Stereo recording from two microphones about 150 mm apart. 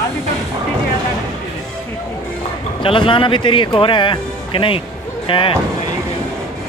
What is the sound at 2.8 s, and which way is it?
Speech, 35° left (ahead or behind).